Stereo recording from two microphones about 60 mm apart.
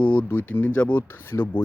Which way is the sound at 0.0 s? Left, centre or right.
Left.